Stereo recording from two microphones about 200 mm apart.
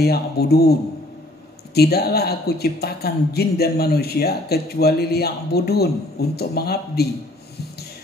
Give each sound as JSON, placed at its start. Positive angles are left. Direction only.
{"t": 0.0, "sound": "speech", "side_deg": 55}
{"t": 1.8, "sound": "speech", "side_deg": 55}